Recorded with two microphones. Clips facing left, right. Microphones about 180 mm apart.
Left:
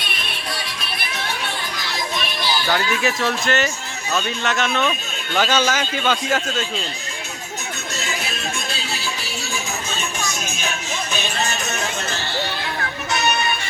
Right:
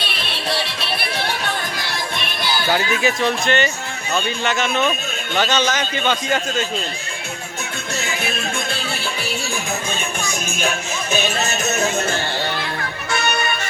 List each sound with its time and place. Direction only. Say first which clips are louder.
0.0 s music: right 4 dB; 30° right (ahead or behind)
2.6 s speech: right 3 dB; 5° right (ahead or behind)
5.5 s speech: even; 10° left (ahead or behind)
8.2 s music: right 4 dB; 55° right (ahead or behind)
11.6 s music: right 6 dB; 45° right (ahead or behind)